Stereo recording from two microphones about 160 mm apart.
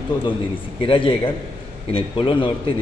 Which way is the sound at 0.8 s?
35° left (ahead or behind).